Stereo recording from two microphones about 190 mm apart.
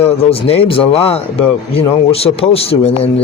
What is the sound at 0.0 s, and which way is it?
Speech, 30° left (ahead or behind).